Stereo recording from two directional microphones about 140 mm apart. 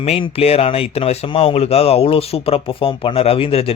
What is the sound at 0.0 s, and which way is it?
Speech, 45° left (ahead or behind).